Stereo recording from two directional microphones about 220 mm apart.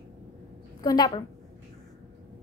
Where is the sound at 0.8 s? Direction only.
20° left (ahead or behind).